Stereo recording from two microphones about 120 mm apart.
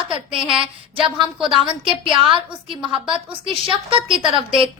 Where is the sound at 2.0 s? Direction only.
45° right (ahead or behind).